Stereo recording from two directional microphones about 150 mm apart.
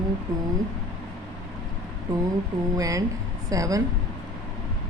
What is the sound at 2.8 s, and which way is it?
A woman's voice, 20° right (ahead or behind).